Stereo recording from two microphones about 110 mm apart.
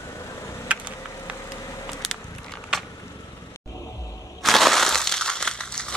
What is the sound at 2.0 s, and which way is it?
Walk, 5° left (ahead or behind).